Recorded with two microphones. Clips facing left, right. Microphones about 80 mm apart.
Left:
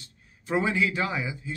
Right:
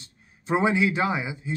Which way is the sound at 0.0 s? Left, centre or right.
Right.